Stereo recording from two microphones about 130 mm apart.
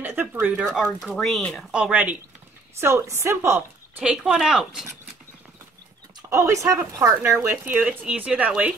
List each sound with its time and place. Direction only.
0.0 s speech: 15° right (ahead or behind)
1.0 s speech: centre (ahead or behind)
1.7 s a woman's voice: 10° right (ahead or behind)
4.0 s speech: 5° right (ahead or behind)
6.3 s speech: 25° right (ahead or behind)